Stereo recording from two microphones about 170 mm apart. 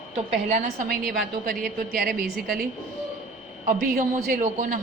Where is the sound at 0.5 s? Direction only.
50° right (ahead or behind).